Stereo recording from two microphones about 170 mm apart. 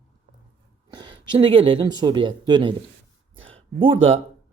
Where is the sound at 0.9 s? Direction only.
25° right (ahead or behind).